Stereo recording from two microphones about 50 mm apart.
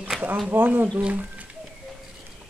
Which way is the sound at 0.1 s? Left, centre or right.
Centre.